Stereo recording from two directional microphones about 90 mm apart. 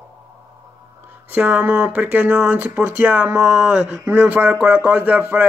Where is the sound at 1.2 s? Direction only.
15° right (ahead or behind).